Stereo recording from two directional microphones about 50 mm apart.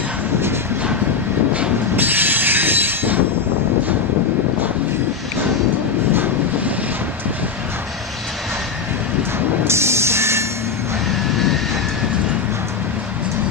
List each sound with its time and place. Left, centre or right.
2.0 s train: right
9.7 s a sound: right
11.3 s vehicle: centre